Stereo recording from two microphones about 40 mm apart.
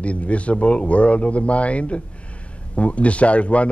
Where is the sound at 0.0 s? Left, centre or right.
Left.